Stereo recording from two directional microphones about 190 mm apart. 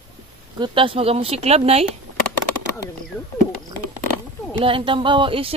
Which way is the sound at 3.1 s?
5° left (ahead or behind).